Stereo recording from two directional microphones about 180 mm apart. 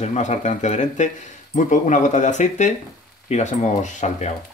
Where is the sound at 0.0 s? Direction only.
40° left (ahead or behind).